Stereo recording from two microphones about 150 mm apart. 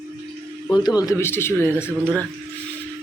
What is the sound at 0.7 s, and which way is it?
A man's voice, 25° left (ahead or behind).